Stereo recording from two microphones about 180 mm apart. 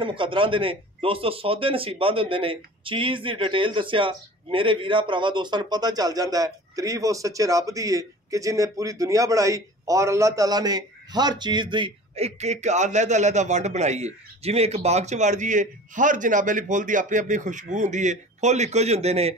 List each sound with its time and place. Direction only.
0.0 s a man's voice: 30° right (ahead or behind)